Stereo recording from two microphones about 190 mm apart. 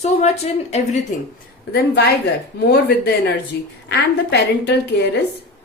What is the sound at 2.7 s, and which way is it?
Speech, 55° left (ahead or behind).